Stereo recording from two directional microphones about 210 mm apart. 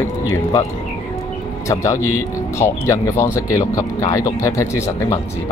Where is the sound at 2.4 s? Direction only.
15° left (ahead or behind).